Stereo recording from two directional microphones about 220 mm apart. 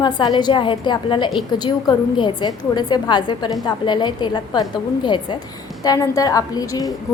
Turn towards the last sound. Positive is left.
turn(degrees=15)  # may be behind; listen again after turning